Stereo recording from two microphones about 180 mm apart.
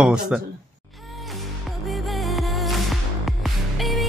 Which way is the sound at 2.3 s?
Centre (ahead or behind).